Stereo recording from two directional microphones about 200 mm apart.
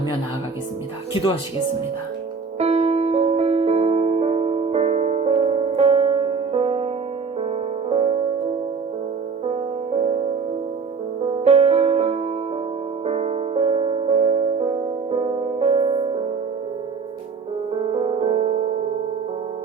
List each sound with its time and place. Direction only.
2.6 s music: 35° right (ahead or behind)
9.5 s music: 30° right (ahead or behind)
11.4 s music: 35° right (ahead or behind)
17.9 s music: 30° right (ahead or behind)